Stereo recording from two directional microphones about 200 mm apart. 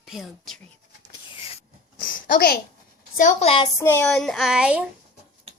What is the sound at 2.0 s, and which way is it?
A child's voice, 45° left (ahead or behind).